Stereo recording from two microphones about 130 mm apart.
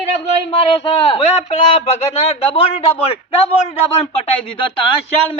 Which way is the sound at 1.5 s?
55° left (ahead or behind).